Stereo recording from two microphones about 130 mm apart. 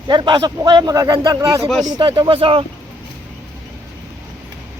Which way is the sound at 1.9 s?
40° right (ahead or behind).